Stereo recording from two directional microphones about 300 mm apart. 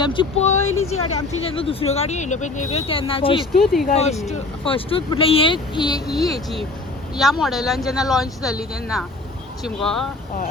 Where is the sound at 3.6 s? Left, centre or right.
Centre.